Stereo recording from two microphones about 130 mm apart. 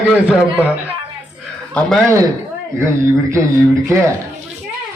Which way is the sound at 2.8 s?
20° right (ahead or behind).